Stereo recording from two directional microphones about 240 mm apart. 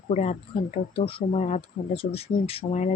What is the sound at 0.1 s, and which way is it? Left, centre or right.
Speech, left.